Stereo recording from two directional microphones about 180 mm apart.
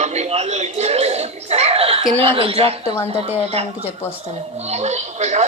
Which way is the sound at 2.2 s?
30° right (ahead or behind).